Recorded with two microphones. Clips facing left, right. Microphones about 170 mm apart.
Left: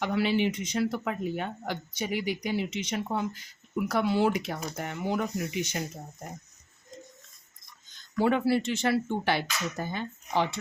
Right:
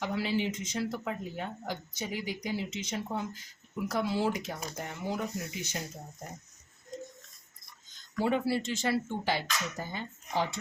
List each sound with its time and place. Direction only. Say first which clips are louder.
0.0 s speech: left 5 dB; 70° left (ahead or behind)
8.2 s speech: left 4 dB; 65° left (ahead or behind)